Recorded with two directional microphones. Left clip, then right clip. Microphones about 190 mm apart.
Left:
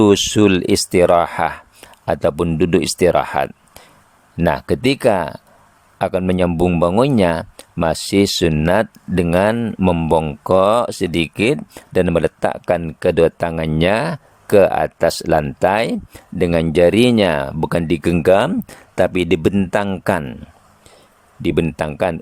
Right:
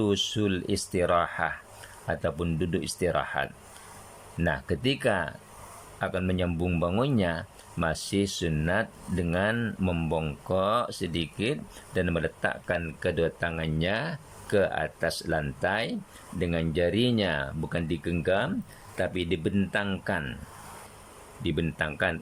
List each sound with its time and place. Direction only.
0.0 s speech: 45° left (ahead or behind)
10.2 s a man's voice: 40° left (ahead or behind)
21.4 s speech: 40° left (ahead or behind)